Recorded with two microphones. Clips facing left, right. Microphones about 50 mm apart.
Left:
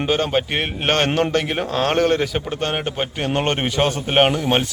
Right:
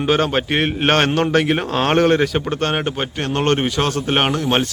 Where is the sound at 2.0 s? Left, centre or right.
Centre.